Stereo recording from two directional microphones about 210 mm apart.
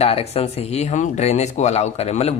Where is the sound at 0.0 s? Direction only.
30° left (ahead or behind).